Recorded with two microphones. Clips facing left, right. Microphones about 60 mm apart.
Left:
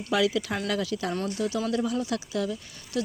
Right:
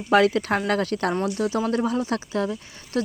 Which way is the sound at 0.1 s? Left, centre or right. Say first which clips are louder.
Right 7 dB; right.